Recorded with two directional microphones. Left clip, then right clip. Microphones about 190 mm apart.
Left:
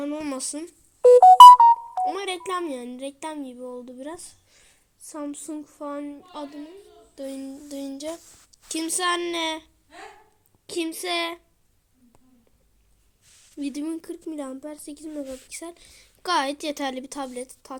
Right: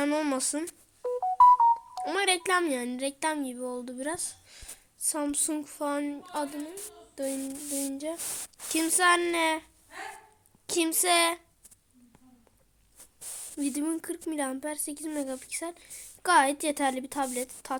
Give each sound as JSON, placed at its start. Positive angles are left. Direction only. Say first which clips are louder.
{"t": 0.2, "sound": "a woman's voice", "louder": "right 2 dB", "side_deg": -10}
{"t": 1.1, "sound": "music", "louder": "left 12 dB", "side_deg": 45}
{"t": 2.0, "sound": "a woman's voice", "louder": "right 1 dB", "side_deg": -10}
{"t": 10.7, "sound": "a woman's voice", "louder": "right 2 dB", "side_deg": -10}
{"t": 13.6, "sound": "a woman's voice", "louder": "left 1 dB", "side_deg": -5}